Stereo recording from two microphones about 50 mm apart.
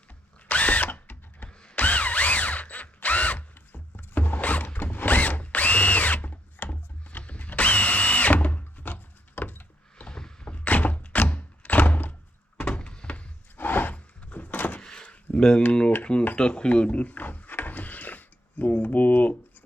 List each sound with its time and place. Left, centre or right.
0.4 s drill: left
10.1 s a sound: centre
10.5 s thunk: left
12.5 s thunk: left
13.6 s a sound: left
13.9 s door: left
14.8 s door: centre
15.4 s speech: centre
16.6 s a sound: left